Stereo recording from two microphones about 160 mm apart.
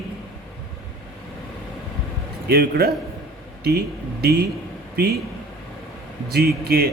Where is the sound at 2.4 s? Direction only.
80° right.